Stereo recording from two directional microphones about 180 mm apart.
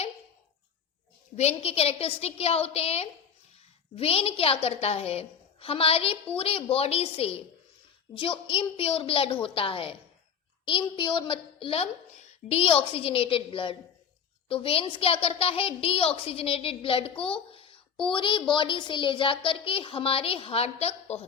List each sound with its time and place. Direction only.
1.4 s a woman's voice: 35° left (ahead or behind)